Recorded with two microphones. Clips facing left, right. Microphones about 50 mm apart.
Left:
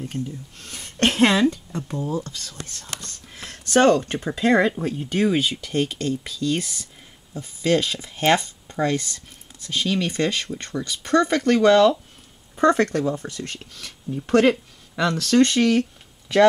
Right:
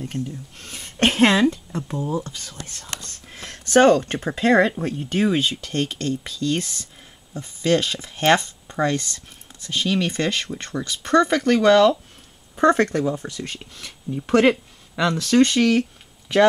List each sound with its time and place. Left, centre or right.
0.6 s speech: centre
3.4 s a sound: right
4.1 s speech: centre
4.5 s speech: centre
9.8 s speech: centre
12.5 s speech: centre